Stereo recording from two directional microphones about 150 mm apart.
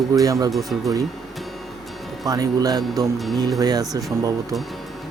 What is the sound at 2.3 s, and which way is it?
Speech, 25° right (ahead or behind).